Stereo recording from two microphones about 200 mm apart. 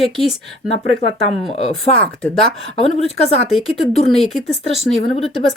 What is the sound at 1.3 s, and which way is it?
A woman's voice, 30° left (ahead or behind).